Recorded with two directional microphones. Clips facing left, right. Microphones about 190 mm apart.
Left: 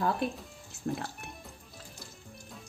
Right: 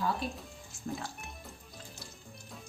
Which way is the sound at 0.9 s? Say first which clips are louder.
Left 5 dB; 55° left (ahead or behind).